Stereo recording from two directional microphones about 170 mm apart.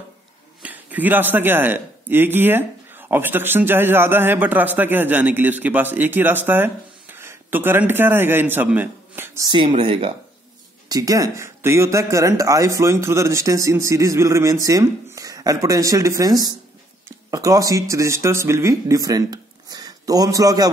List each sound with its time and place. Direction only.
0.6 s speech: 10° right (ahead or behind)
9.5 s speech: 30° right (ahead or behind)
10.9 s speech: 20° right (ahead or behind)